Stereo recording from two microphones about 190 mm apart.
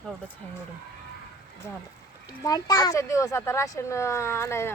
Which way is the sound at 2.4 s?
20° left (ahead or behind).